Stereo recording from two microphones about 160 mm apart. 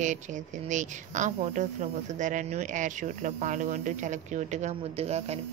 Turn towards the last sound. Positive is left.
turn(degrees=-40)  # may be behind; listen again after turning